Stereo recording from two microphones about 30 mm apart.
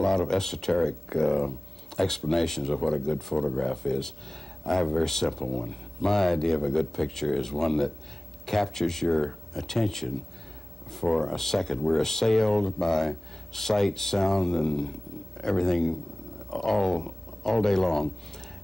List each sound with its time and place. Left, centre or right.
0.0 s speech: centre